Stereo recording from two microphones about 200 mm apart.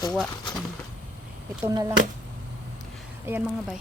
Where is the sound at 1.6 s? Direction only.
15° right (ahead or behind).